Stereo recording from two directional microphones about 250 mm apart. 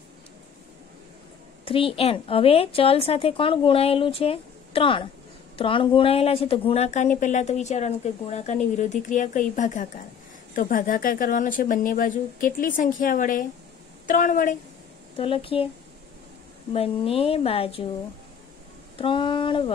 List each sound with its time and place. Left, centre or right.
1.6 s a woman's voice: left
15.1 s a woman's voice: left
16.7 s a woman's voice: left
18.9 s a woman's voice: centre